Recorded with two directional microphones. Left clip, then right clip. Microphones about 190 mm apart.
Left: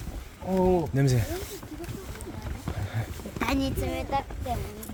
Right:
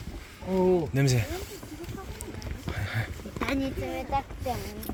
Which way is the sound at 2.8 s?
10° left (ahead or behind).